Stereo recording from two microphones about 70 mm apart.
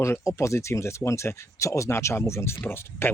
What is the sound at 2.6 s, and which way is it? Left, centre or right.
Speech, left.